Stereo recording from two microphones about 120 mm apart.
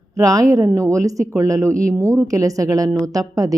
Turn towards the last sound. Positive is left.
turn(degrees=-30)  # may be behind; listen again after turning